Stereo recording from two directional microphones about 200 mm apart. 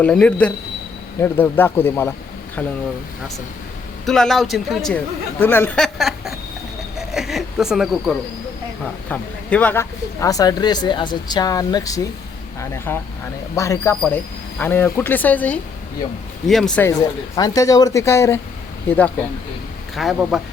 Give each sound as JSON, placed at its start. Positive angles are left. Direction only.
{"t": 0.0, "sound": "speech", "side_deg": 5}
{"t": 4.0, "sound": "speech", "side_deg": 0}
{"t": 7.0, "sound": "a sound", "side_deg": 0}
{"t": 8.8, "sound": "speech", "side_deg": 5}
{"t": 17.0, "sound": "speech", "side_deg": 20}
{"t": 20.0, "sound": "speech", "side_deg": 0}